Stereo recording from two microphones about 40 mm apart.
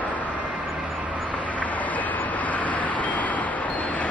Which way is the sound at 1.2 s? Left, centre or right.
Left.